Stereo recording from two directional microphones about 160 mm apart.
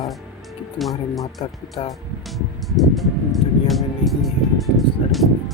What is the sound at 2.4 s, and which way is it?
Speech, centre (ahead or behind).